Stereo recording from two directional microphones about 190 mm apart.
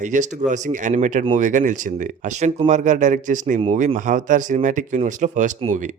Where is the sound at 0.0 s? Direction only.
40° right (ahead or behind).